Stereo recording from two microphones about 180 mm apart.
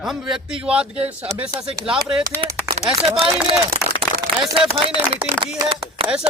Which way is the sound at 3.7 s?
35° right (ahead or behind).